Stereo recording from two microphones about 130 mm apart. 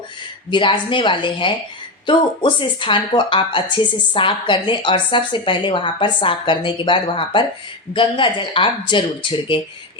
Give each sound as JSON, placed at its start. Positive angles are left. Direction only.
{"t": 0.5, "sound": "speech", "side_deg": 40}